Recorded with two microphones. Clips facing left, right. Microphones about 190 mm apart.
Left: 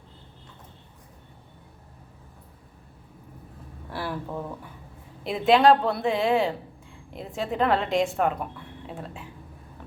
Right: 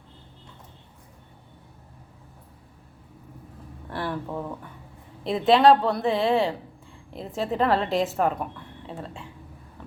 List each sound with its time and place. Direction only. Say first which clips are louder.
3.8 s a woman's voice: right 2 dB; 5° left (ahead or behind)